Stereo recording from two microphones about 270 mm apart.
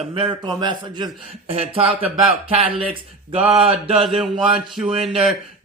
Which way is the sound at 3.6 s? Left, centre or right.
Right.